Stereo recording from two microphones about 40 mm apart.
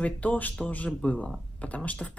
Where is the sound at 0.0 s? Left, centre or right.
Left.